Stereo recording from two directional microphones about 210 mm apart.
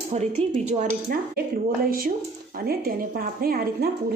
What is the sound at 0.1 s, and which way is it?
A woman's voice, 30° right (ahead or behind).